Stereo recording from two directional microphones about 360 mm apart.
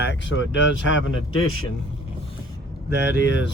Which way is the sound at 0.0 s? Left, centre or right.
Left.